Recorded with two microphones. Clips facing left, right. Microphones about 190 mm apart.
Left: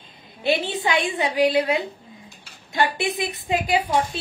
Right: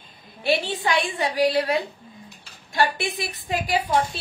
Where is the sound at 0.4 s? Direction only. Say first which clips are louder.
Left 1 dB; 20° left (ahead or behind).